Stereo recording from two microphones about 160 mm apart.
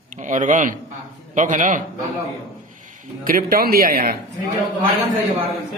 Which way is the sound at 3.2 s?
65° right (ahead or behind).